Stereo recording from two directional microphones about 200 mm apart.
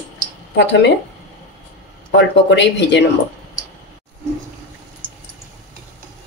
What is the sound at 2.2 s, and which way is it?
Speech, 60° left (ahead or behind).